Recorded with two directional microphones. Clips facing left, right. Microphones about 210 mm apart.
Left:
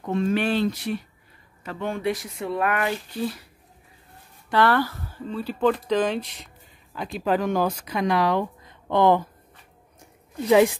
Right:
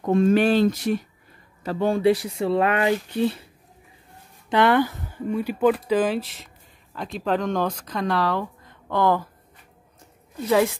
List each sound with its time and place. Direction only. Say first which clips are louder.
0.0 s speech: right 5 dB; 45° right (ahead or behind); by 3.4 s 25° right (ahead or behind)
4.5 s speech: right 2 dB; 20° right (ahead or behind); by 9.3 s 20° left (ahead or behind)
10.5 s speech: left 3 dB; 15° left (ahead or behind)